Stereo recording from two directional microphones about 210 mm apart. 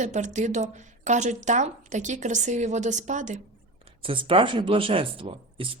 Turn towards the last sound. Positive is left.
turn(degrees=-25)  # may be behind; listen again after turning